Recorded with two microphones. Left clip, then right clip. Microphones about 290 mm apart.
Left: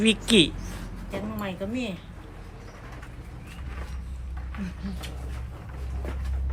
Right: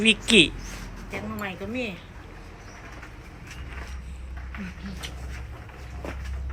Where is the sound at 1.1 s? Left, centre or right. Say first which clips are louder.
Even; left.